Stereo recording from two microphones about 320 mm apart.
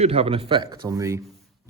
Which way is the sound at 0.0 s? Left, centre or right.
Centre.